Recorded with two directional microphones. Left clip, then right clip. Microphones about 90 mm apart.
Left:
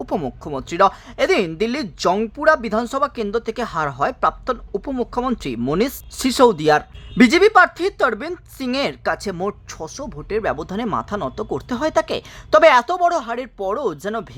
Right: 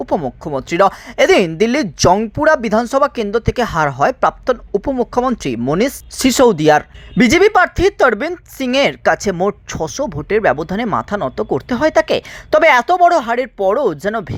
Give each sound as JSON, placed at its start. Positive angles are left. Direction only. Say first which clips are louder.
{"t": 0.3, "sound": "speech", "louder": "right 6 dB", "side_deg": -30}
{"t": 1.0, "sound": "speech", "louder": "right 7 dB", "side_deg": -50}
{"t": 6.2, "sound": "speech", "louder": "right 4 dB", "side_deg": -45}
{"t": 9.8, "sound": "speech", "louder": "right 10 dB", "side_deg": -55}